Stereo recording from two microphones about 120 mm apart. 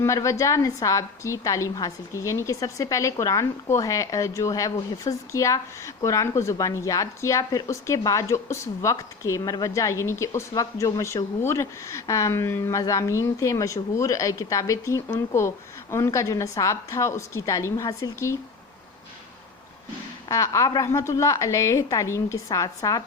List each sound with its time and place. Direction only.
0.0 s a woman's voice: 25° left (ahead or behind)
20.2 s a woman's voice: 25° left (ahead or behind)